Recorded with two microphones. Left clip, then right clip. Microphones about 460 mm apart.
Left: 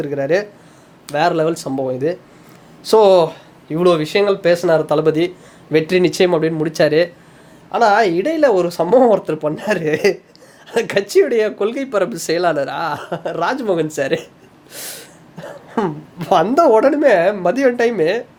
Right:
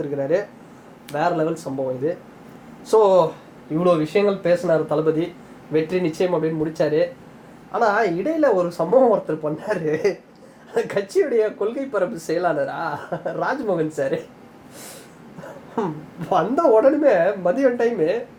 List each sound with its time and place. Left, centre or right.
0.2 s speech: left
2.9 s speech: left
16.3 s speech: left